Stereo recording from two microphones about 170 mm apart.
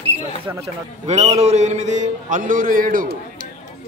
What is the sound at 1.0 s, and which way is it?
A man's voice, 40° right (ahead or behind).